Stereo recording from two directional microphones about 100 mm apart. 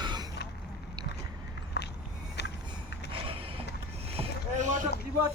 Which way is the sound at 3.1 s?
65° right (ahead or behind).